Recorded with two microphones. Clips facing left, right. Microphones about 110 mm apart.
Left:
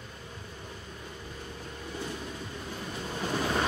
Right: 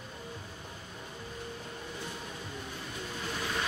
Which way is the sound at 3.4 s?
40° left (ahead or behind).